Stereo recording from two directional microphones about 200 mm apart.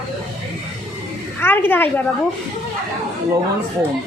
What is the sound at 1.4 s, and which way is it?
Speech, 10° left (ahead or behind).